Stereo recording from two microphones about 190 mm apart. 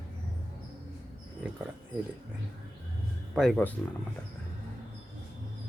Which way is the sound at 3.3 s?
Centre (ahead or behind).